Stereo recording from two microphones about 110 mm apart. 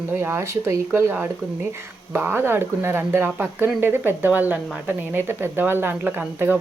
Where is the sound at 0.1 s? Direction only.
20° right (ahead or behind).